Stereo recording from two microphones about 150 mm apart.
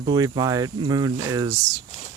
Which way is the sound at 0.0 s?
30° right (ahead or behind).